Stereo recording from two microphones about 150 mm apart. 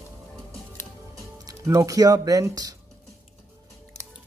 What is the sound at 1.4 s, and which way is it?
Speech, 20° right (ahead or behind).